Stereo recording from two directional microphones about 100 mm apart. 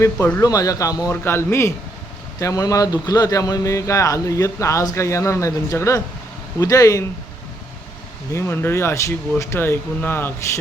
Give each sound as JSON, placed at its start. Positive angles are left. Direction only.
{"t": 0.0, "sound": "speech", "side_deg": 20}
{"t": 0.4, "sound": "speech", "side_deg": 35}
{"t": 1.1, "sound": "speech", "side_deg": 25}
{"t": 8.3, "sound": "speech", "side_deg": 25}